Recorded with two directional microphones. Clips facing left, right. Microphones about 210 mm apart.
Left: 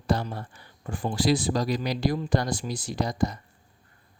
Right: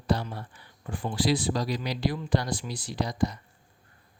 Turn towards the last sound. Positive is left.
turn(degrees=45)  # may be behind; listen again after turning